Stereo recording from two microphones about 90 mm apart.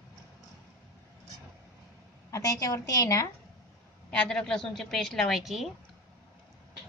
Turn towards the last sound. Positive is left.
turn(degrees=0)  # may be behind; listen again after turning